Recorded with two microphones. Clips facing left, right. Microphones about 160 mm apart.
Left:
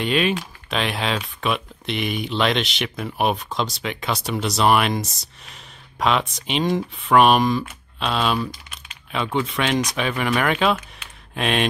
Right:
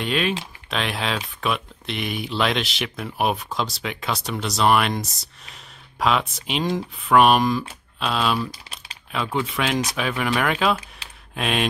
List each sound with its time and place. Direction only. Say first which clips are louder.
0.0 s speech: left 3 dB; centre (ahead or behind)
8.5 s typing: left 2 dB; 35° right (ahead or behind)
9.1 s speech: left 2 dB; centre (ahead or behind)
11.0 s a sound: even; 35° right (ahead or behind)
11.3 s speech: left 2 dB; centre (ahead or behind)